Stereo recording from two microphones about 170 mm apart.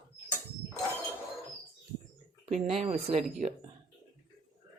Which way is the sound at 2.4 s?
35° right (ahead or behind).